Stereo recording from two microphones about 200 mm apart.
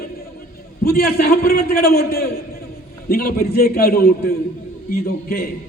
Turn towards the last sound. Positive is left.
turn(degrees=50)  # may be behind; listen again after turning